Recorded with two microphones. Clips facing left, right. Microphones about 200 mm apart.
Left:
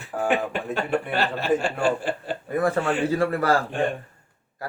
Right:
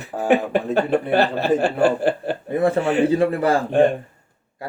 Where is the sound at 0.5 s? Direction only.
35° right (ahead or behind).